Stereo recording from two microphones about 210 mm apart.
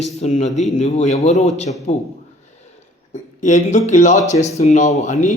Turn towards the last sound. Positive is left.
turn(degrees=35)  # may be behind; listen again after turning